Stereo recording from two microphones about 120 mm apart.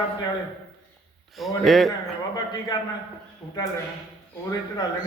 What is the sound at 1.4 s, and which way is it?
Speech, centre (ahead or behind).